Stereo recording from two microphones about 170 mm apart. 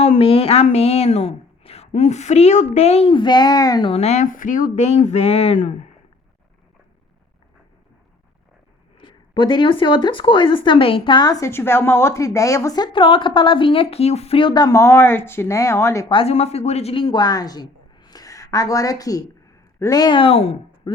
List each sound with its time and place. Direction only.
0.0 s a woman's voice: 35° left (ahead or behind)
9.0 s speech: 30° left (ahead or behind)
16.0 s speech: 35° left (ahead or behind)